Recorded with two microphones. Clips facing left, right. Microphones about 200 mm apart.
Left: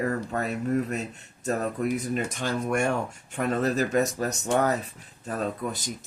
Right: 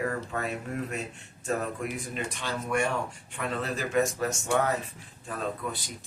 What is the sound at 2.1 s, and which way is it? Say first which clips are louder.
Speech: left 5 dB; 45° left (ahead or behind).